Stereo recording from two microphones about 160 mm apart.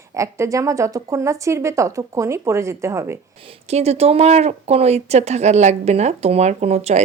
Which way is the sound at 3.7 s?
40° right (ahead or behind).